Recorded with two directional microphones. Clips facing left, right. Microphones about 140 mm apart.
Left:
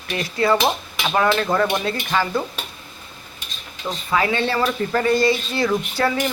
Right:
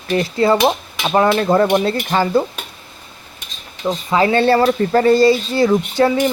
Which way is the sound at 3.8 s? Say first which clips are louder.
Right 6 dB; 25° right (ahead or behind).